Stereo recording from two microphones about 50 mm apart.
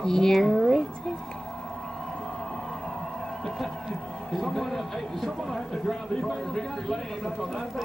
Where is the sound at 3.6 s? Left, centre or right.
Centre.